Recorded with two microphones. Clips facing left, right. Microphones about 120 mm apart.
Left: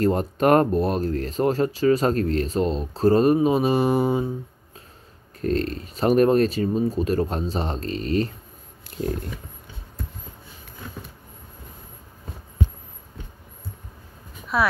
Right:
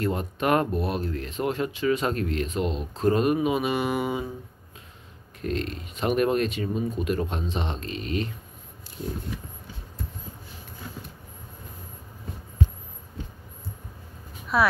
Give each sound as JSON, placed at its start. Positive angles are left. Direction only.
{"t": 0.0, "sound": "speech", "side_deg": 40}
{"t": 5.4, "sound": "speech", "side_deg": 40}
{"t": 14.5, "sound": "speech", "side_deg": 0}